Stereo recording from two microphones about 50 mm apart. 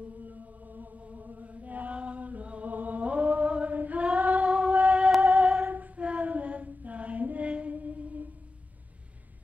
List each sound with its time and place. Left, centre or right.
0.3 s chant: right
4.6 s singing: right
5.4 s female singing: centre
5.7 s female singing: right